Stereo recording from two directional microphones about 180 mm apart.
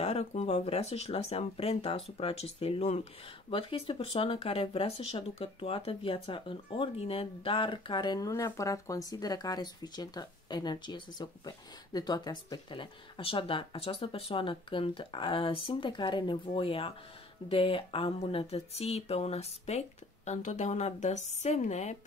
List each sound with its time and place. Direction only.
0.0 s speech: 35° left (ahead or behind)